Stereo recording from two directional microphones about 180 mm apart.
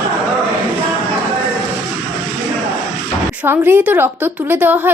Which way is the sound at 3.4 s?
10° right (ahead or behind).